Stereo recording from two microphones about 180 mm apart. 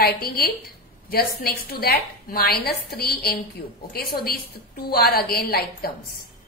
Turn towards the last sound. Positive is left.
turn(degrees=60)  # may be behind; listen again after turning